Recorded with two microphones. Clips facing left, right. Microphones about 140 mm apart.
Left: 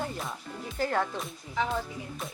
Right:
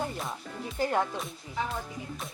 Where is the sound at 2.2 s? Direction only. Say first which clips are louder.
Left 3 dB; centre (ahead or behind).